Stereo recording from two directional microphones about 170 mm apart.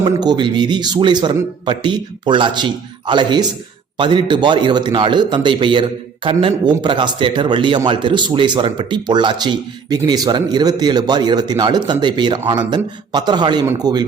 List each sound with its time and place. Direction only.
0.0 s speech: 25° right (ahead or behind)